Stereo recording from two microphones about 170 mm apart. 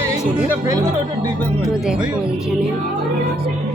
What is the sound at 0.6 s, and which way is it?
Speech, 20° right (ahead or behind).